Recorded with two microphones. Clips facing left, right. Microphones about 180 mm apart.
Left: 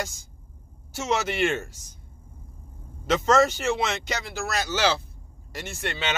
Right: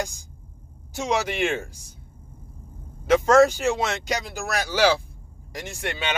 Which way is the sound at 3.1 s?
10° right (ahead or behind).